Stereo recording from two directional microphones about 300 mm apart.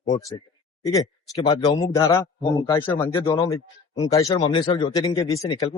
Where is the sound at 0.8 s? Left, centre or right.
Centre.